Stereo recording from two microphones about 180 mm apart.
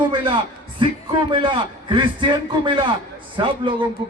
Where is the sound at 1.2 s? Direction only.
25° right (ahead or behind).